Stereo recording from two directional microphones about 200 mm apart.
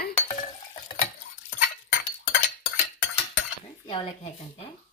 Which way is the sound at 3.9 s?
30° left (ahead or behind).